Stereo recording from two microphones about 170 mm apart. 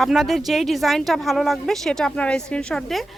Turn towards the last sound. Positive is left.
turn(degrees=5)  # may be behind; listen again after turning